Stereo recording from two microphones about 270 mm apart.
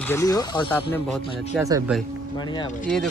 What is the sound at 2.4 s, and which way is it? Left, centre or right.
Speech, centre.